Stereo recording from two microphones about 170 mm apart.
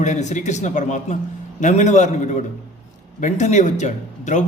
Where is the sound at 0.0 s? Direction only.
45° left (ahead or behind).